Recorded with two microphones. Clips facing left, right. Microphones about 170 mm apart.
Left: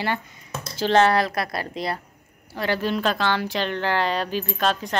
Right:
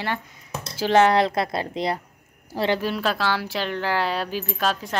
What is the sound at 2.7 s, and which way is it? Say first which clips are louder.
Speech: left 1 dB; 5° right (ahead or behind).